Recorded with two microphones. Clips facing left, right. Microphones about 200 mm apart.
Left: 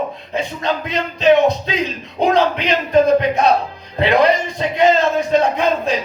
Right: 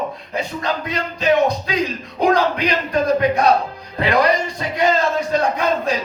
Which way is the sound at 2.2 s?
25° left (ahead or behind).